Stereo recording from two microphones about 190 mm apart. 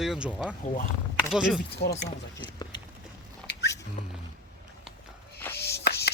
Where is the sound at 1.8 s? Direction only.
60° left (ahead or behind).